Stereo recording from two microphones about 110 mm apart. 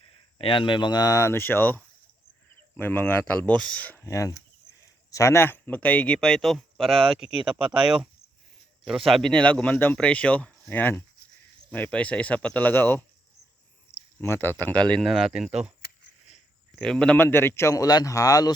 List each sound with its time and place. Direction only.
0.3 s speech: 55° left (ahead or behind); by 4.0 s 15° left (ahead or behind)
4.0 s a man's voice: 30° left (ahead or behind); by 7.3 s centre (ahead or behind)
7.5 s speech: 10° right (ahead or behind); by 13.1 s 15° left (ahead or behind)
13.9 s a sound: 25° left (ahead or behind)
14.6 s speech: 10° left (ahead or behind); by 15.7 s 5° right (ahead or behind)
16.8 s speech: 5° left (ahead or behind)
17.2 s a man's voice: 20° left (ahead or behind)